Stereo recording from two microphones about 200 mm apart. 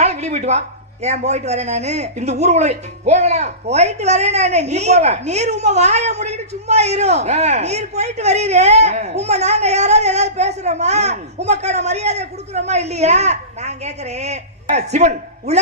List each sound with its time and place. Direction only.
0.0 s a man's voice: 35° right (ahead or behind)